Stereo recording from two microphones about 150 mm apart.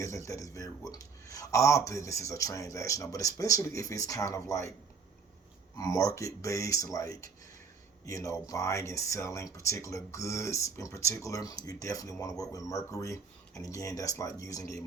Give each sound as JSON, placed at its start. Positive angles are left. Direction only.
{"t": 0.0, "sound": "speech", "side_deg": 20}
{"t": 5.7, "sound": "speech", "side_deg": 25}